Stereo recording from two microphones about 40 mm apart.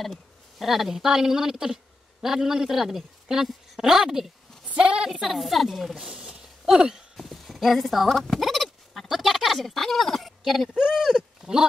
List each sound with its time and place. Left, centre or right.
0.0 s speech: centre
4.7 s a woman's voice: right
5.2 s speech: centre
7.2 s clip-clop: centre
8.1 s bleat: centre
9.1 s speech: centre
10.8 s speech: centre